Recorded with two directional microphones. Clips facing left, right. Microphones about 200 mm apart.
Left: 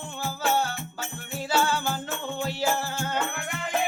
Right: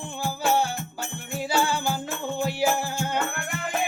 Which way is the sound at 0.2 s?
10° right (ahead or behind).